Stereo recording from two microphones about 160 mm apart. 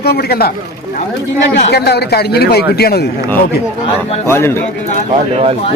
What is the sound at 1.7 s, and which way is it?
A man's voice, 90° left.